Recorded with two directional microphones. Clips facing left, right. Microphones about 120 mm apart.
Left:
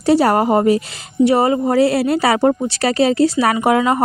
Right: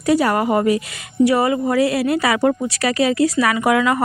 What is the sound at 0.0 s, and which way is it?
A woman's voice, 30° left (ahead or behind).